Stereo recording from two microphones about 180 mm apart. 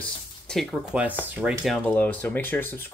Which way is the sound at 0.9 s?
5° right (ahead or behind).